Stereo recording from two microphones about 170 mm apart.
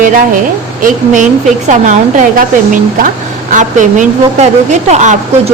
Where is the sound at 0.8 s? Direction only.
45° right (ahead or behind).